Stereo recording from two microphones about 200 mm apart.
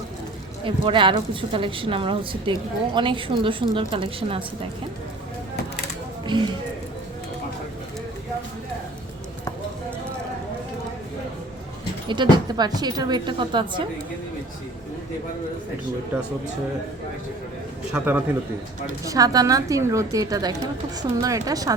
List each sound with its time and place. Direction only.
0.6 s a woman's voice: 25° right (ahead or behind)
6.2 s speech: 25° right (ahead or behind)
12.0 s a woman's voice: 20° right (ahead or behind)
17.9 s a woman's voice: 10° right (ahead or behind)